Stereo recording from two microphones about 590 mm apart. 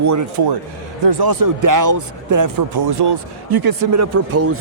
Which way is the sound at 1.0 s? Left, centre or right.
Right.